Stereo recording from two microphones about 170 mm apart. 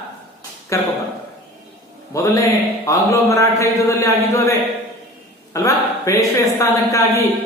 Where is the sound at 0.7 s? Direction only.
15° left (ahead or behind).